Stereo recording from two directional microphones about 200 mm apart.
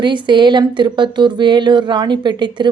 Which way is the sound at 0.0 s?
25° right (ahead or behind).